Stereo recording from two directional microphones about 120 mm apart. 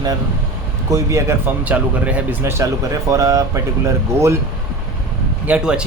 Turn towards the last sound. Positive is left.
turn(degrees=-5)  # may be behind; listen again after turning